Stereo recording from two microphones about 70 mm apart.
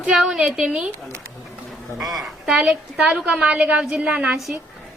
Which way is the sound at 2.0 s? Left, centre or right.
Centre.